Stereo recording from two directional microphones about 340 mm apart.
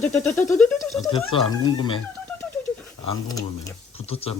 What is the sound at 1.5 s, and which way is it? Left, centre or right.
Speech, centre.